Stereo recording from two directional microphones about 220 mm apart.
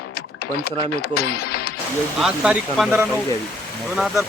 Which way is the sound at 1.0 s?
45° left (ahead or behind).